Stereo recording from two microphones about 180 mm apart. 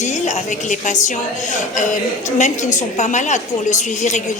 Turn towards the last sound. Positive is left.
turn(degrees=40)  # may be behind; listen again after turning